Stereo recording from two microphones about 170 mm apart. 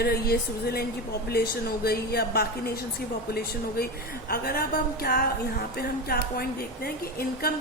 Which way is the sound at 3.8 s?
65° left (ahead or behind).